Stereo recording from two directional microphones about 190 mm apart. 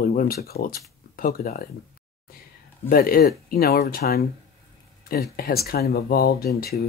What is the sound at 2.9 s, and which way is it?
Speech, 50° left (ahead or behind).